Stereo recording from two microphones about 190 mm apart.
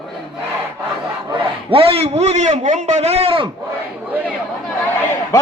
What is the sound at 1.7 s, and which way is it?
A man's voice, 30° right (ahead or behind).